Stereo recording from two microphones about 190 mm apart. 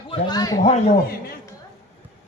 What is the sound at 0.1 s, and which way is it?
Speech, 20° left (ahead or behind).